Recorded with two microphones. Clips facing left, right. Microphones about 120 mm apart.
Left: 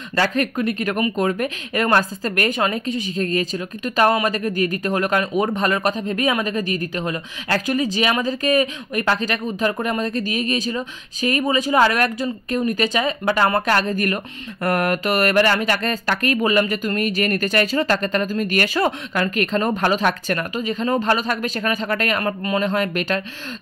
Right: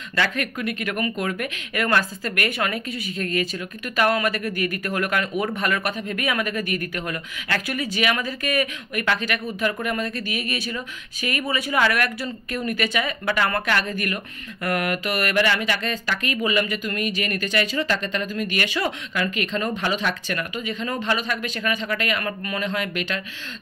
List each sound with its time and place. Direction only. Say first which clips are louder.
0.1 s a woman's voice: left 5 dB; 35° left (ahead or behind)
22.6 s speech: left 4 dB; 40° left (ahead or behind)